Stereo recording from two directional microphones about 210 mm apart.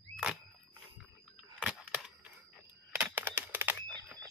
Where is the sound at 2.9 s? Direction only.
10° right (ahead or behind).